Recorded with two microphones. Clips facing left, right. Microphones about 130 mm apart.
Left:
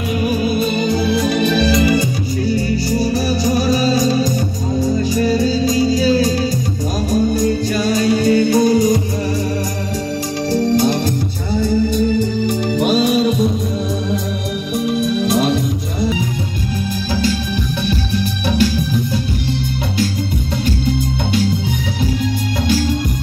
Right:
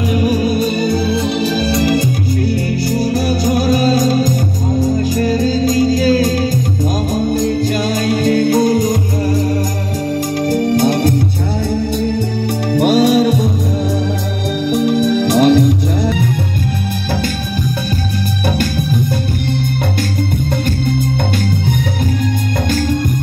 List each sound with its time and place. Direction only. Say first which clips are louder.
0.1 s music: right 1 dB; 40° right (ahead or behind)
2.4 s music: left 3 dB; 60° right (ahead or behind)
7.9 s music: left 3 dB; 50° right (ahead or behind)
10.5 s music: even; 55° right (ahead or behind)
14.7 s music: right 4 dB; 65° right (ahead or behind)
18.6 s music: left 1 dB; 50° right (ahead or behind)